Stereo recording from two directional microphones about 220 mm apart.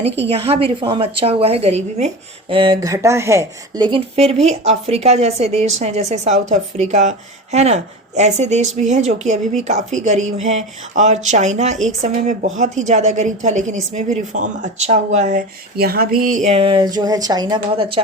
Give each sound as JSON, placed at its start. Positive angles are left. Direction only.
{"t": 0.3, "sound": "a woman's voice", "side_deg": -25}